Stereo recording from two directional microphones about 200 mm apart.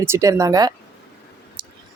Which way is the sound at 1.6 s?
25° right (ahead or behind).